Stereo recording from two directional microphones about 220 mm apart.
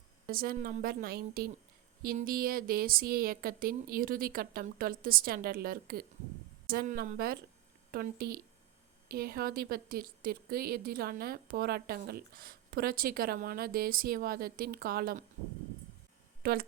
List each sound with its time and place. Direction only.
0.3 s speech: 40° right (ahead or behind)
16.4 s speech: 45° right (ahead or behind)